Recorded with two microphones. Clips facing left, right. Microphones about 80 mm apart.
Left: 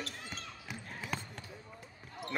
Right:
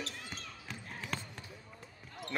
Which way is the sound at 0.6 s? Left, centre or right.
Centre.